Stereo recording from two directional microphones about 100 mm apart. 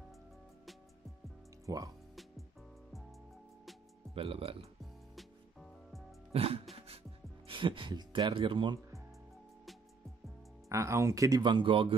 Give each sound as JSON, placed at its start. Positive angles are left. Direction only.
{"t": 1.7, "sound": "speech", "side_deg": -35}
{"t": 4.1, "sound": "speech", "side_deg": -70}
{"t": 5.1, "sound": "music", "side_deg": 0}
{"t": 6.3, "sound": "music", "side_deg": -80}
{"t": 10.7, "sound": "speech", "side_deg": -30}
{"t": 11.4, "sound": "speech", "side_deg": -55}